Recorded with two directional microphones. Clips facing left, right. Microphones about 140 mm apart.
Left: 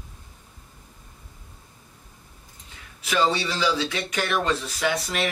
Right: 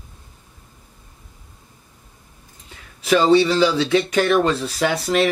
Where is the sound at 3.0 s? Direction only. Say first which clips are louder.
Right 9 dB; 35° right (ahead or behind).